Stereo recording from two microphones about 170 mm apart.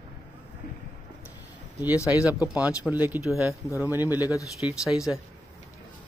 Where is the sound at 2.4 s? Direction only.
10° right (ahead or behind).